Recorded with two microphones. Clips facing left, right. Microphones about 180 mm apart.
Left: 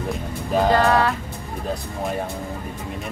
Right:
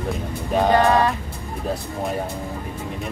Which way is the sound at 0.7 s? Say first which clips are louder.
Right 2 dB; 20° right (ahead or behind).